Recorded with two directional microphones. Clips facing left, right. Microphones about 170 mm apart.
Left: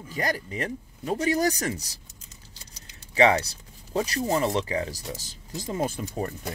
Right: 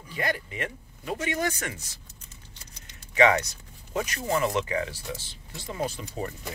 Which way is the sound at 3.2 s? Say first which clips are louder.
Left 1 dB; 30° left (ahead or behind).